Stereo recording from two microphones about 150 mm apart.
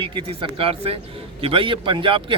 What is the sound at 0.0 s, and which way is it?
A man's voice, 35° right (ahead or behind).